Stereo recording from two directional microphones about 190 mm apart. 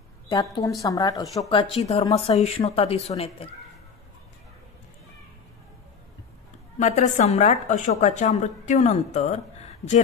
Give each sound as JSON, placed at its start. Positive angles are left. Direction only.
{"t": 0.3, "sound": "a woman's voice", "side_deg": 20}
{"t": 6.8, "sound": "speech", "side_deg": 40}